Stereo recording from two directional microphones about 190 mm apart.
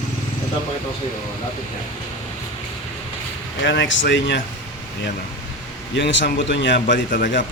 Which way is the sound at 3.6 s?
75° left (ahead or behind).